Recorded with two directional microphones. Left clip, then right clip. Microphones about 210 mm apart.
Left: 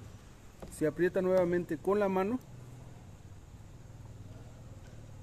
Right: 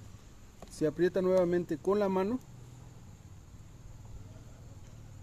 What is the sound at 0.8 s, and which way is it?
Speech, 5° right (ahead or behind).